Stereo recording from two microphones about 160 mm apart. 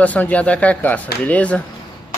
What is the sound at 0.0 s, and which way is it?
Speech, 10° left (ahead or behind).